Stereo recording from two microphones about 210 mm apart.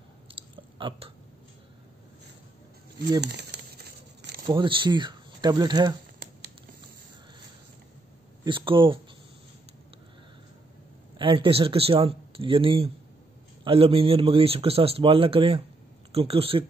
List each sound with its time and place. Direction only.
0.3 s chewing: 25° right (ahead or behind)
3.2 s crumpling: 55° right (ahead or behind)
4.5 s speech: 25° right (ahead or behind)
8.5 s speech: 25° right (ahead or behind)
11.1 s speech: 25° right (ahead or behind)